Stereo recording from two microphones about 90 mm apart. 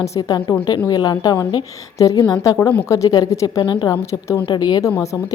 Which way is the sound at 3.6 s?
65° left (ahead or behind).